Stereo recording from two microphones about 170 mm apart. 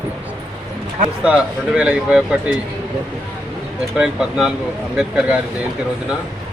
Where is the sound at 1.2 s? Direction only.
5° right (ahead or behind).